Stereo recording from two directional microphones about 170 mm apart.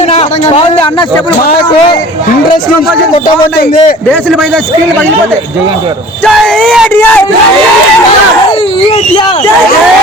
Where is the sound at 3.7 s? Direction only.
40° left (ahead or behind).